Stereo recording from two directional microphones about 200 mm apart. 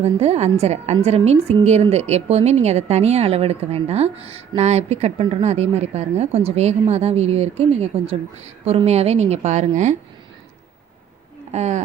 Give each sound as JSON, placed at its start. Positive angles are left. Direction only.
{"t": 0.0, "sound": "a woman's voice", "side_deg": -30}
{"t": 11.5, "sound": "a woman's voice", "side_deg": -35}